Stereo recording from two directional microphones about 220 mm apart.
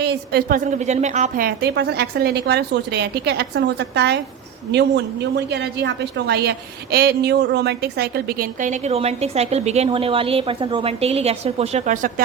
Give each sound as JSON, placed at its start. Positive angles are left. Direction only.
{"t": 0.0, "sound": "a woman's voice", "side_deg": -50}